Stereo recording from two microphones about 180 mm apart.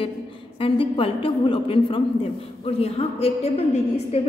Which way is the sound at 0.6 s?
30° left (ahead or behind).